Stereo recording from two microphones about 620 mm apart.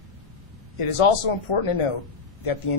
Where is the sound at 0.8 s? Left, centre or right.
Left.